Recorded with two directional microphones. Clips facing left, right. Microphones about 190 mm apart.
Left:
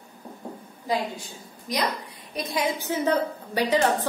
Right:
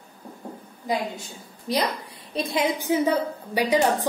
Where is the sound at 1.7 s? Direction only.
30° right (ahead or behind).